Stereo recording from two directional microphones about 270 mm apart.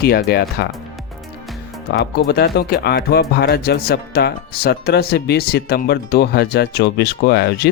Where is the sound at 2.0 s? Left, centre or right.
Left.